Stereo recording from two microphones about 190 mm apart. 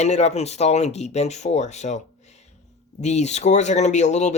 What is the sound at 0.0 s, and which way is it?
Speech, 35° left (ahead or behind).